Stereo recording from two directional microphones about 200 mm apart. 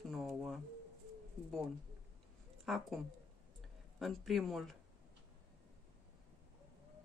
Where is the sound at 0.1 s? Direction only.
Centre (ahead or behind).